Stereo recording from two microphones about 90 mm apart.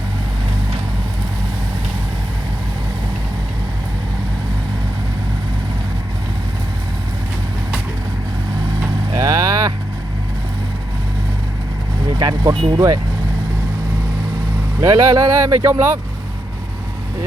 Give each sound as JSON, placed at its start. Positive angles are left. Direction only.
{"t": 9.1, "sound": "vehicle", "side_deg": -40}
{"t": 12.2, "sound": "speech", "side_deg": -40}
{"t": 14.8, "sound": "speech", "side_deg": -30}